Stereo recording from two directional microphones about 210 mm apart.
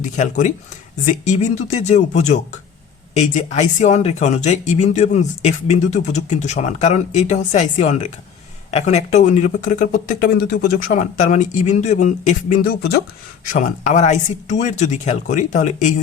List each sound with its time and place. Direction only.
0.2 s speech: 35° left (ahead or behind)